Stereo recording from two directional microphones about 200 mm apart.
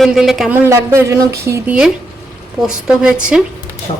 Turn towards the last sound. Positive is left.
turn(degrees=25)  # may be behind; listen again after turning